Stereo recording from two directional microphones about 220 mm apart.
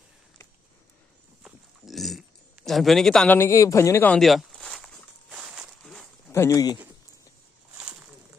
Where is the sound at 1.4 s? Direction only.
Centre (ahead or behind); by 6.8 s 15° left (ahead or behind).